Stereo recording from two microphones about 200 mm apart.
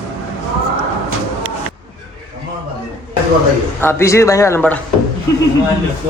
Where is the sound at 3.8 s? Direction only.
10° left (ahead or behind).